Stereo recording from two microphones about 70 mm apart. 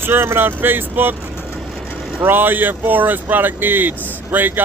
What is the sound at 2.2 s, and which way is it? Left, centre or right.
Speech, right.